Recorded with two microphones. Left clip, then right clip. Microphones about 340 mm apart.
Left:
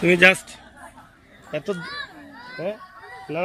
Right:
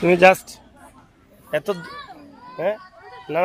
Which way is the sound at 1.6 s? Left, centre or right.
Right.